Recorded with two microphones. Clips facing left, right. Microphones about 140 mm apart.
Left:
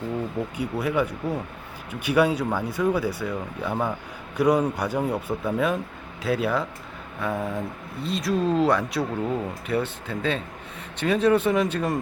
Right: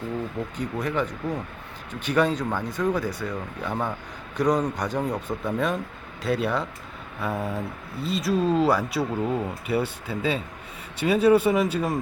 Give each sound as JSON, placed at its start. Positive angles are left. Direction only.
{"t": 0.5, "sound": "speech", "side_deg": 10}